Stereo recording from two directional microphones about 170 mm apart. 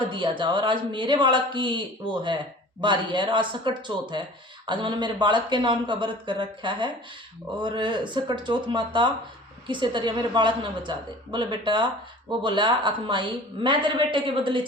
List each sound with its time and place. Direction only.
0.1 s speech: 30° right (ahead or behind)
2.8 s speech: 25° right (ahead or behind)